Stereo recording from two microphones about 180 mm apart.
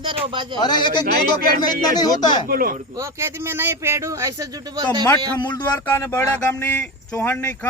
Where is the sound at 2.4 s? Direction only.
50° right (ahead or behind).